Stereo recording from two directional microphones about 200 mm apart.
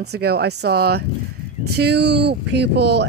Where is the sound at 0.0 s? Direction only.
55° right (ahead or behind).